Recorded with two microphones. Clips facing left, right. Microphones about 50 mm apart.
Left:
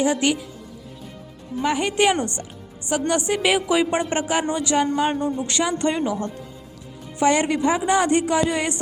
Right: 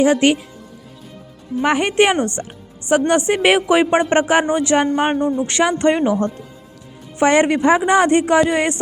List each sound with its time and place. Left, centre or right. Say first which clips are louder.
0.0 s speech: right 6 dB; right
1.6 s speech: right 4 dB; right
5.1 s speech: right 6 dB; right
5.5 s speech: right 7 dB; right